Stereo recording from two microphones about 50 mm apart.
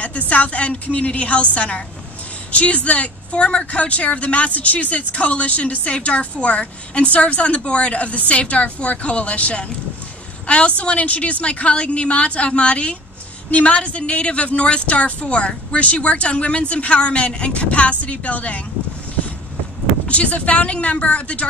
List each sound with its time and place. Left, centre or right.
0.0 s a woman's voice: left
20.1 s a woman's voice: left